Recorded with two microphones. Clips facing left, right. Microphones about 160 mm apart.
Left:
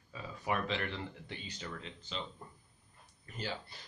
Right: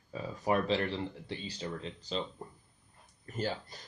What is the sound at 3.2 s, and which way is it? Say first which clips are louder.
Speech: right 6 dB; 45° right (ahead or behind).